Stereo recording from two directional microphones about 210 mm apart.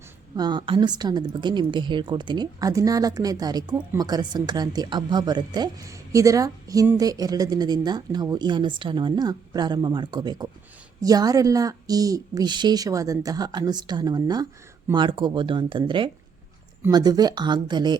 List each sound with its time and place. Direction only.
0.3 s a woman's voice: 20° right (ahead or behind)